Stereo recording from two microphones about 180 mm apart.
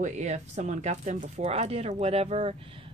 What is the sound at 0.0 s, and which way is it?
Speech, 40° right (ahead or behind).